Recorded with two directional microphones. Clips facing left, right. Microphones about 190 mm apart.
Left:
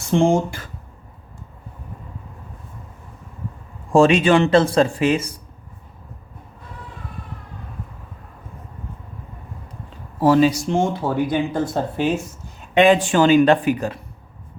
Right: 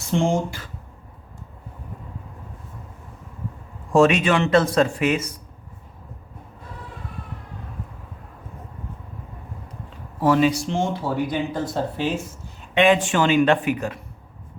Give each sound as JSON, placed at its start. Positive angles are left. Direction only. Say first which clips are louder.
{"t": 0.3, "sound": "speech", "louder": "left 4 dB", "side_deg": 50}
{"t": 3.9, "sound": "speech", "louder": "left 3 dB", "side_deg": 30}
{"t": 10.2, "sound": "speech", "louder": "left 3 dB", "side_deg": 35}
{"t": 12.7, "sound": "speech", "louder": "left 3 dB", "side_deg": 35}